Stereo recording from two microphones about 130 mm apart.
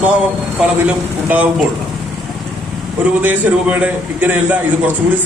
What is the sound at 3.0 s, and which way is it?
A man's voice, 10° right (ahead or behind).